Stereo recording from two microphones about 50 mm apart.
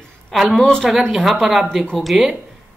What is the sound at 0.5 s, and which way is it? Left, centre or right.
Speech, centre.